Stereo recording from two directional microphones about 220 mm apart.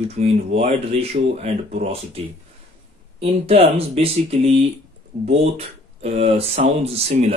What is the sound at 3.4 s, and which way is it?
Speech, 25° right (ahead or behind).